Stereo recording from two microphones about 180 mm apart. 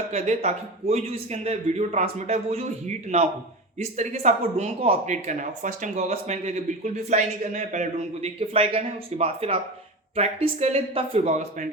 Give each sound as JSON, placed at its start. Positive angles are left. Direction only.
{"t": 0.1, "sound": "speech", "side_deg": -35}